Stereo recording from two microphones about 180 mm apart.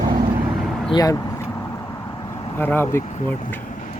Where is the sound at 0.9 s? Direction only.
20° left (ahead or behind).